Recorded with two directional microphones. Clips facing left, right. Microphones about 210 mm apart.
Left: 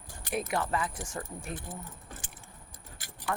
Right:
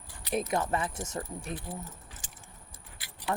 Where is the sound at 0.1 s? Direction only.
50° left (ahead or behind).